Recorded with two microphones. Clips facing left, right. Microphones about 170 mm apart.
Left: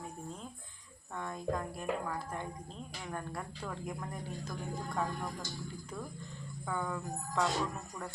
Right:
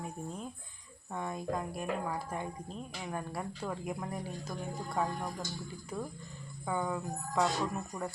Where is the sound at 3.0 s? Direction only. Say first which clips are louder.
Right 2 dB; 10° right (ahead or behind).